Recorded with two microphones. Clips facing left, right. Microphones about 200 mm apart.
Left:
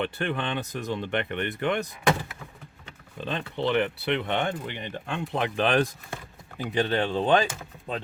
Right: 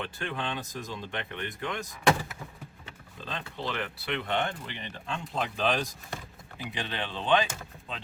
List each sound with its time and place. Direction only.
0.0 s speech: 65° left (ahead or behind)
3.2 s speech: 65° left (ahead or behind)
6.6 s speech: 50° left (ahead or behind)